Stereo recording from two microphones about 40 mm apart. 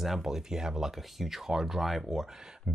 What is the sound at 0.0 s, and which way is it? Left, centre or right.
Speech, centre.